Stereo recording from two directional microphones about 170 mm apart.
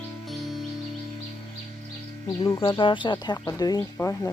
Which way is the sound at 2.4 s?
30° left (ahead or behind).